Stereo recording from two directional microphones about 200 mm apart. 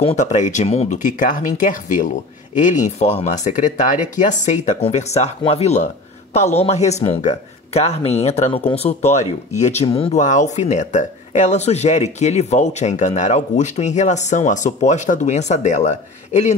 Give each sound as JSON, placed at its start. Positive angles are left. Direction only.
{"t": 0.0, "sound": "speech", "side_deg": 35}